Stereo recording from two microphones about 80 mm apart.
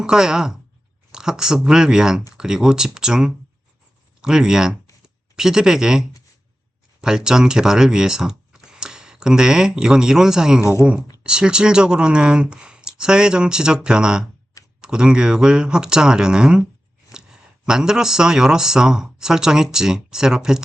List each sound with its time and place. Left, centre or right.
0.0 s speech: centre
10.6 s speech: left
11.2 s speech: centre
17.1 s a sound: centre
17.7 s speech: centre